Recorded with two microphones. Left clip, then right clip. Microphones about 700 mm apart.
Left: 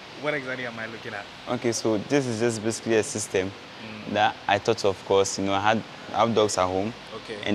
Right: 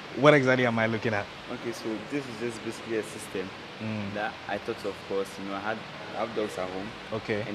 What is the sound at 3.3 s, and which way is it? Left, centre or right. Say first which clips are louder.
Speech: left 9 dB; left.